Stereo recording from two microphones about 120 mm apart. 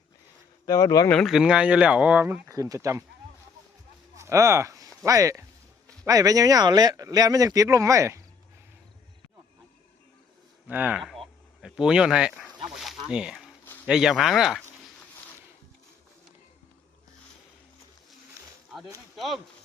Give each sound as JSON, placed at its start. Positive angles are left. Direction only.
{"t": 0.6, "sound": "speech", "side_deg": 30}
{"t": 1.0, "sound": "speech", "side_deg": 10}
{"t": 1.3, "sound": "speech", "side_deg": -5}
{"t": 2.5, "sound": "speech", "side_deg": -30}
{"t": 4.2, "sound": "speech", "side_deg": -25}
{"t": 10.7, "sound": "speech", "side_deg": -15}
{"t": 11.0, "sound": "a sound", "side_deg": 0}
{"t": 13.1, "sound": "speech", "side_deg": -5}
{"t": 19.1, "sound": "speech", "side_deg": 0}